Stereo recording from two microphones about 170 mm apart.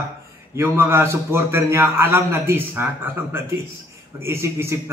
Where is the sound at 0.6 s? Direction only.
15° right (ahead or behind).